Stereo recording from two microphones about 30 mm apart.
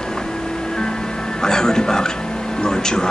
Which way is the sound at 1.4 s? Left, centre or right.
Left.